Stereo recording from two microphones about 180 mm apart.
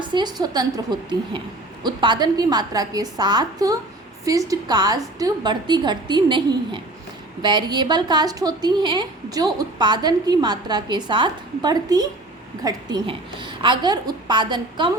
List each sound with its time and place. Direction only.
0.0 s a woman's voice: 25° right (ahead or behind)